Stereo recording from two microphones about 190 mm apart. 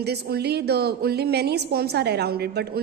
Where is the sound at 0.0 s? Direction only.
60° right (ahead or behind).